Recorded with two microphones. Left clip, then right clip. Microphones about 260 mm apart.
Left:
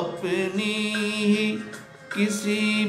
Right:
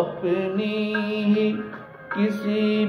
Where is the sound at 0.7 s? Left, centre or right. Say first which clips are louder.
Right 1 dB; left.